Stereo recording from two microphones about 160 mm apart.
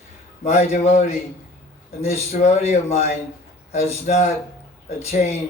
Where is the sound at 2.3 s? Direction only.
45° left (ahead or behind).